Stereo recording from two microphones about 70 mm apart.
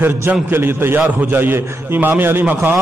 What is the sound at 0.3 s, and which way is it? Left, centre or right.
A man's voice, right.